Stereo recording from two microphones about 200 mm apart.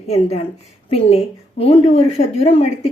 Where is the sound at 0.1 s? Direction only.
30° left (ahead or behind).